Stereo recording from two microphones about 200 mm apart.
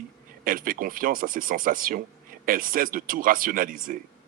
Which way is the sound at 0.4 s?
45° right (ahead or behind).